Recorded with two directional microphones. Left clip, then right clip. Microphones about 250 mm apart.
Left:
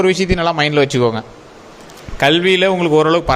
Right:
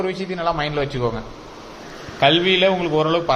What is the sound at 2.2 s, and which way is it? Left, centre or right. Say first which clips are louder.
A man's voice: left 3 dB; left.